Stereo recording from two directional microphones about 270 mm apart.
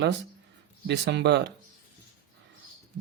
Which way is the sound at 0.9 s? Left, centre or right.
Right.